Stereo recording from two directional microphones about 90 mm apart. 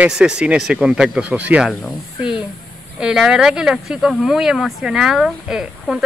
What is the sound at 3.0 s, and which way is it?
Speech, 10° right (ahead or behind).